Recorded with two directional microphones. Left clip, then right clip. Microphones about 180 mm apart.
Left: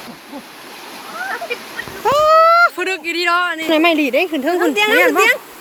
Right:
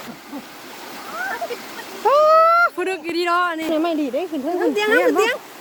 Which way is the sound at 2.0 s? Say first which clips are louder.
Left 2 dB; 25° right (ahead or behind).